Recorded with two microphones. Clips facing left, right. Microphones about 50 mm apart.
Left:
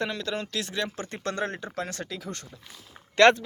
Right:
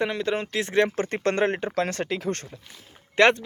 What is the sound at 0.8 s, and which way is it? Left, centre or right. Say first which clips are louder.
Speech: right 8 dB; right.